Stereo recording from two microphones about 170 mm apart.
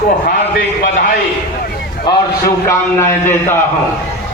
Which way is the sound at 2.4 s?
15° left (ahead or behind).